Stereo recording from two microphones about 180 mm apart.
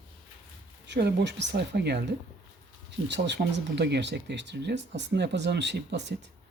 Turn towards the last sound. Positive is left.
turn(degrees=-70)  # may be behind; listen again after turning